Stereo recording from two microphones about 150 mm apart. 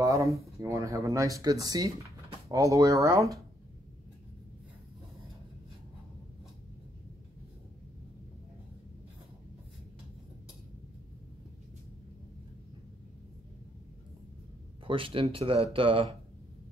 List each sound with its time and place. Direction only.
0.0 s speech: 20° right (ahead or behind)
14.9 s speech: 35° right (ahead or behind)